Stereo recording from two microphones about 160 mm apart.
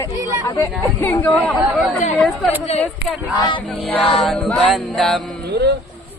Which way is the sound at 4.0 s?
Centre (ahead or behind).